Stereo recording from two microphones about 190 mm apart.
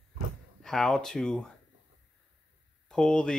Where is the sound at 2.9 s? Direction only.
5° left (ahead or behind).